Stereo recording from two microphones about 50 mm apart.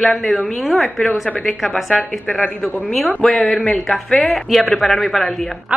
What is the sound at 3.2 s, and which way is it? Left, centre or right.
A woman's voice, centre.